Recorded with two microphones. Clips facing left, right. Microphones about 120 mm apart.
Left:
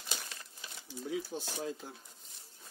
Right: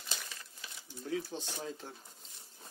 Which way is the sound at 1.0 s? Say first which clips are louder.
Even; 5° left (ahead or behind).